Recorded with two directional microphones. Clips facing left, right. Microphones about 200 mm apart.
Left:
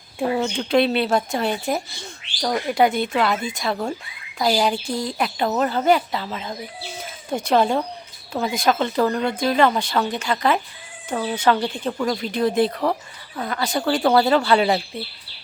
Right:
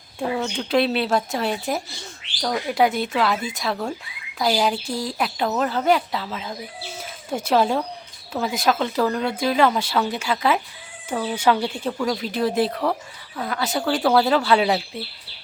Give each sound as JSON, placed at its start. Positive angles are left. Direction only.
{"t": 0.2, "sound": "speech", "side_deg": 10}
{"t": 0.5, "sound": "speech", "side_deg": 0}